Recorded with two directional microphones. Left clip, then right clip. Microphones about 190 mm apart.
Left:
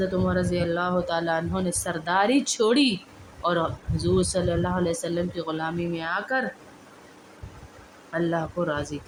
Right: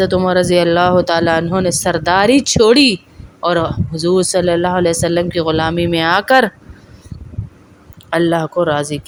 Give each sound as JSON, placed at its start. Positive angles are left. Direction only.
{"t": 0.0, "sound": "speech", "side_deg": -50}
{"t": 8.1, "sound": "speech", "side_deg": -45}